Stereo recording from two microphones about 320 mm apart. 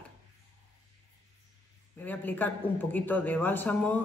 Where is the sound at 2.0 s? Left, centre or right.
Centre.